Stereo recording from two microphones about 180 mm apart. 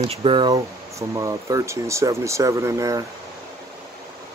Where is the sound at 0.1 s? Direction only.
30° right (ahead or behind).